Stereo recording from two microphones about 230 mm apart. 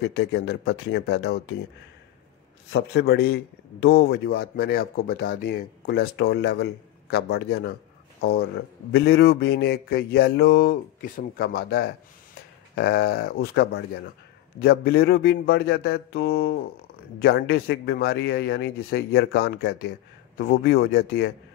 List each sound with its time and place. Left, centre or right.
0.0 s speech: left
2.7 s speech: left